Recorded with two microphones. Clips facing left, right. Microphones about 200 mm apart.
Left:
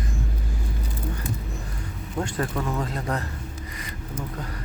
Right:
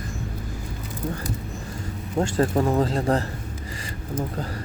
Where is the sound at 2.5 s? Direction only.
40° right (ahead or behind).